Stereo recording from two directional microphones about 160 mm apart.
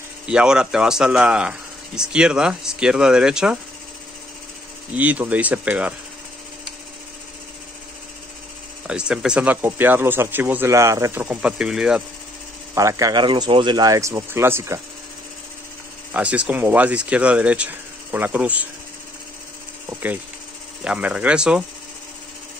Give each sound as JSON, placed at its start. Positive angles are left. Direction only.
{"t": 0.3, "sound": "speech", "side_deg": -5}
{"t": 4.9, "sound": "speech", "side_deg": -10}
{"t": 8.8, "sound": "speech", "side_deg": -5}
{"t": 12.7, "sound": "speech", "side_deg": -20}
{"t": 16.1, "sound": "speech", "side_deg": -10}
{"t": 19.9, "sound": "speech", "side_deg": -10}